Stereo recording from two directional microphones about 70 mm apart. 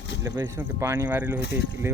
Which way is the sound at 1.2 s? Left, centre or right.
Right.